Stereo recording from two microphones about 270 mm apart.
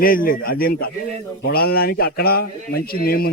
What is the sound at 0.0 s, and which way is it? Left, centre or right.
Speech, left.